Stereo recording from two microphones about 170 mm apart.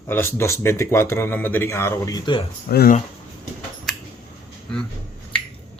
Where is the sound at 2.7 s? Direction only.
60° left (ahead or behind).